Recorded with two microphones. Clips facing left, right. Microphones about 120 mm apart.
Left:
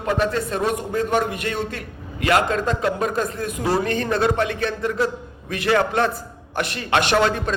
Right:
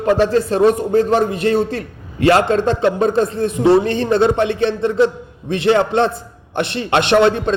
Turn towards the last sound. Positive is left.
turn(degrees=-25)  # may be behind; listen again after turning